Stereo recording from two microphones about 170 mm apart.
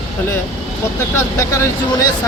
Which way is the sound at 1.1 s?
15° left (ahead or behind).